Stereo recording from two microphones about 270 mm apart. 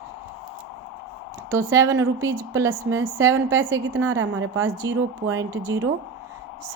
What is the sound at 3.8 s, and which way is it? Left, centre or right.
Speech, right.